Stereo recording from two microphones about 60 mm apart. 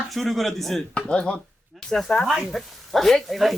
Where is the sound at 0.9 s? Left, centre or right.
Centre.